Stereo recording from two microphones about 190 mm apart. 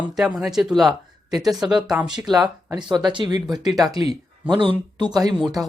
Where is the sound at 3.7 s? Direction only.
Centre (ahead or behind).